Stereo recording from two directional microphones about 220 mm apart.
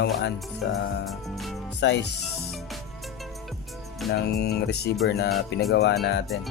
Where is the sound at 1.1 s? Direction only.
Centre (ahead or behind).